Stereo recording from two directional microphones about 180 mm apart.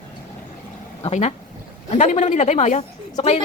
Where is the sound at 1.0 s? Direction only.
35° left (ahead or behind).